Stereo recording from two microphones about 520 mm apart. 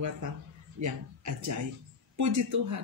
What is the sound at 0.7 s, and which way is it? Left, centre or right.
Speech, right.